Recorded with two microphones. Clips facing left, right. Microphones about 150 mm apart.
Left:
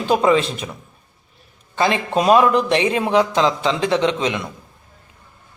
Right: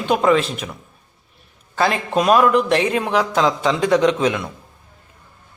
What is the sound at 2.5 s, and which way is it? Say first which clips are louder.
Speech: even; centre (ahead or behind).